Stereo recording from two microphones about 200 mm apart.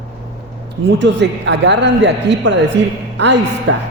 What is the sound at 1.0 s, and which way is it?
A man's voice, 60° right (ahead or behind).